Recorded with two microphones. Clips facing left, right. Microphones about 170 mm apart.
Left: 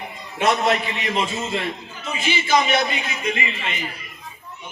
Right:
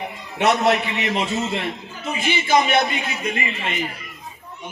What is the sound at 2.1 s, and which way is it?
A man's voice, 55° right (ahead or behind).